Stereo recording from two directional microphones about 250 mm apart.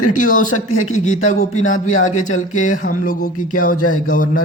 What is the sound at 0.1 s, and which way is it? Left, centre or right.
Speech, left.